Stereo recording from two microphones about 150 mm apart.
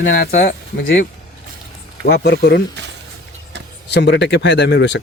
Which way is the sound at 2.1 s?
90° left.